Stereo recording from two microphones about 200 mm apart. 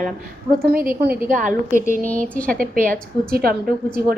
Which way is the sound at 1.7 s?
10° left (ahead or behind).